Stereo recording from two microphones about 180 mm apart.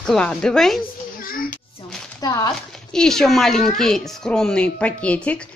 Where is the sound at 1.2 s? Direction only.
50° left (ahead or behind).